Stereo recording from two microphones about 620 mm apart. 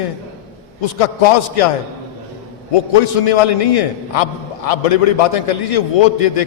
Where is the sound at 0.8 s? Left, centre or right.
Left.